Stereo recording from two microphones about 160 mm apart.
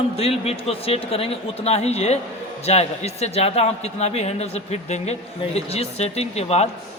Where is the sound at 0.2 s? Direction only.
40° left (ahead or behind).